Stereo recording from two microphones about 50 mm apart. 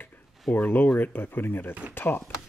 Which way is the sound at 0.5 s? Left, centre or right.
Left.